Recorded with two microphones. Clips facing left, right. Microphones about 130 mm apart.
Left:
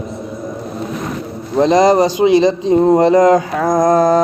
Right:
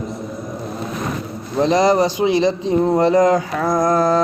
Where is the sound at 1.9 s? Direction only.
15° left (ahead or behind).